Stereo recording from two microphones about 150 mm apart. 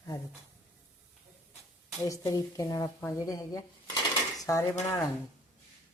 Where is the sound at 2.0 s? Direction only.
25° left (ahead or behind).